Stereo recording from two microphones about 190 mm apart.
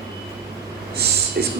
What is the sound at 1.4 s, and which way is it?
Speech, 60° right (ahead or behind).